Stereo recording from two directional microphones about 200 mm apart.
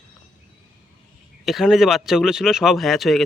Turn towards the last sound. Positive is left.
turn(degrees=0)  # may be behind; listen again after turning